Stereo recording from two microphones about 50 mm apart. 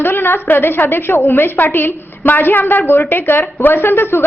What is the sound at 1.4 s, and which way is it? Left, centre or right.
A woman's voice, left.